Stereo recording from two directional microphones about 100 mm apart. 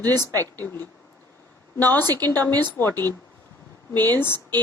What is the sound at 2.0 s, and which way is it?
Speech, 40° right (ahead or behind).